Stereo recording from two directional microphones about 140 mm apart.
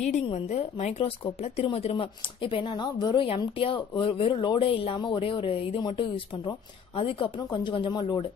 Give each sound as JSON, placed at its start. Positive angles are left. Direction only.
{"t": 0.0, "sound": "a woman's voice", "side_deg": 50}